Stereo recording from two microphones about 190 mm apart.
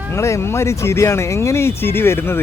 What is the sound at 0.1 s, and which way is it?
Speech, 15° left (ahead or behind).